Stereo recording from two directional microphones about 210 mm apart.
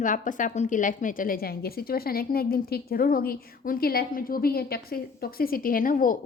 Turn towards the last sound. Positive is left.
turn(degrees=40)  # may be behind; listen again after turning